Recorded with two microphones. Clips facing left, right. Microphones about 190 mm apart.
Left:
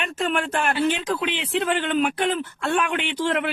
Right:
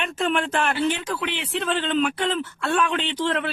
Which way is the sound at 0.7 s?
20° left (ahead or behind).